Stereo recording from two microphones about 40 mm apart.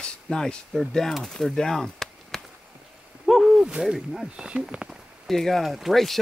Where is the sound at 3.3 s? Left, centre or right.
Centre.